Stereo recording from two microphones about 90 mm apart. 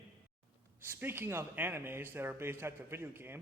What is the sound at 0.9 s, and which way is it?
Speech, 25° right (ahead or behind).